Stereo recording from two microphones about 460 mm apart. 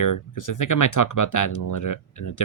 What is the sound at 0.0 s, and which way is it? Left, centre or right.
Speech, left.